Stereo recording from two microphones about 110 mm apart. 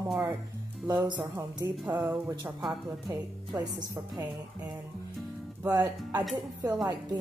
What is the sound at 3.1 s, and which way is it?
Speech, 30° right (ahead or behind).